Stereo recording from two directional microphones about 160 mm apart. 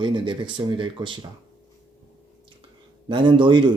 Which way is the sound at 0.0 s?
30° right (ahead or behind).